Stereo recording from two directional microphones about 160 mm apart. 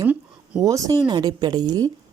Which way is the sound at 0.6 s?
20° right (ahead or behind).